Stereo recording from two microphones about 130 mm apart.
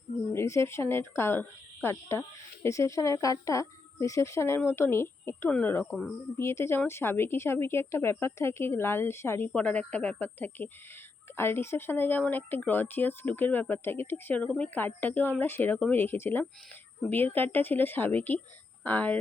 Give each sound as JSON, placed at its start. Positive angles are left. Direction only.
{"t": 0.3, "sound": "speech", "side_deg": 20}
{"t": 9.5, "sound": "speech", "side_deg": 10}